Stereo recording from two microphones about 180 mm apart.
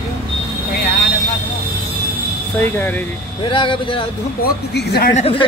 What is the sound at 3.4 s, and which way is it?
Speech, 30° left (ahead or behind).